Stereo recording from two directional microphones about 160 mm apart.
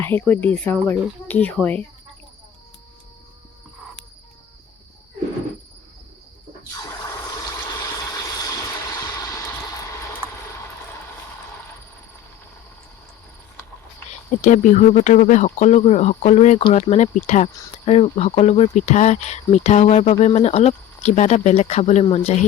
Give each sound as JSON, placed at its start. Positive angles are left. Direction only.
{"t": 0.0, "sound": "speech", "side_deg": 15}
{"t": 7.6, "sound": "vehicle", "side_deg": 20}
{"t": 14.4, "sound": "speech", "side_deg": 55}